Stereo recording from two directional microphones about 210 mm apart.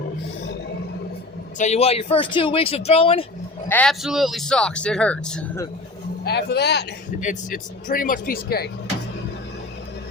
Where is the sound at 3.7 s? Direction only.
5° left (ahead or behind).